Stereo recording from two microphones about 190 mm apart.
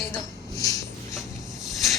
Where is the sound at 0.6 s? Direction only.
15° left (ahead or behind).